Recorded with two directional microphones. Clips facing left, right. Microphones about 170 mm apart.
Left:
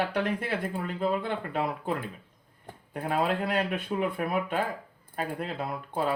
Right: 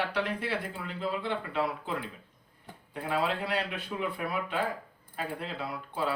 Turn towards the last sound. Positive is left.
turn(degrees=50)  # may be behind; listen again after turning